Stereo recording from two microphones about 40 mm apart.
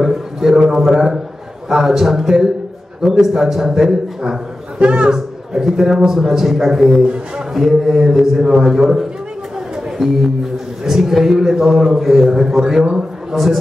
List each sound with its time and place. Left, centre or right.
0.0 s a sound: centre
0.6 s a man's voice: centre
4.7 s a man's voice: right
5.1 s a man's voice: centre